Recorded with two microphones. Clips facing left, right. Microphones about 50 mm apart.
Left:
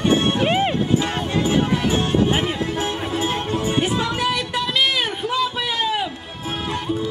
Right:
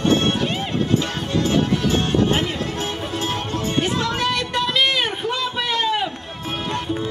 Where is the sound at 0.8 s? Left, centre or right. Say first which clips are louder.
Left 1 dB; centre.